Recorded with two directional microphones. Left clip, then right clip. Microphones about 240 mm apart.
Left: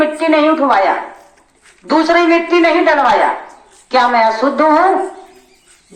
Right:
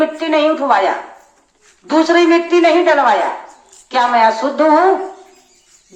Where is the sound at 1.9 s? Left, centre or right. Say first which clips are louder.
Left 1 dB; centre.